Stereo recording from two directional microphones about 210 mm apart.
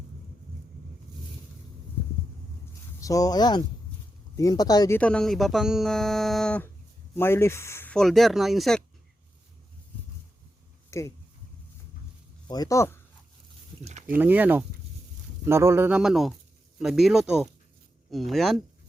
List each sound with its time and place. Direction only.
3.0 s speech: 15° left (ahead or behind)
4.9 s speech: 5° left (ahead or behind)
10.9 s speech: 15° left (ahead or behind)
12.5 s speech: 15° left (ahead or behind)
13.8 s a sound: 35° right (ahead or behind)
14.2 s speech: 10° right (ahead or behind)